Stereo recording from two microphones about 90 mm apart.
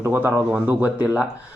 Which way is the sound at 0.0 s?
20° right (ahead or behind).